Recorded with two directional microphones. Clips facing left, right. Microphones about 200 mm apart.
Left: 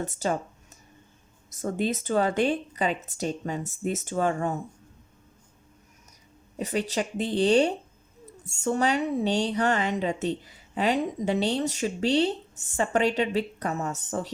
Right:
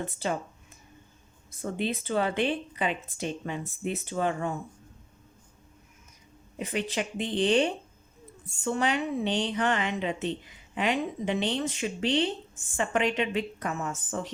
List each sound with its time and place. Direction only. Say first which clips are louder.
0.0 s speech: left 3 dB; 45° left (ahead or behind)
1.6 s speech: left 3 dB; 45° left (ahead or behind)
6.6 s speech: left 3 dB; 40° left (ahead or behind)